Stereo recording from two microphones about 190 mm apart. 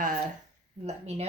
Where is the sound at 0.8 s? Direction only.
35° right (ahead or behind).